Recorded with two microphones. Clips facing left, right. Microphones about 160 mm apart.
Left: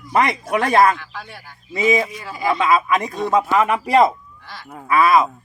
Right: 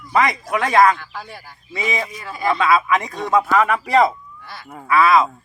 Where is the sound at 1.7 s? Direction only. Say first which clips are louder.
Left 7 dB; 15° left (ahead or behind).